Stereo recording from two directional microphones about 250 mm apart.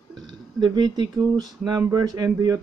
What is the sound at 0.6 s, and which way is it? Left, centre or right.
Speech, centre.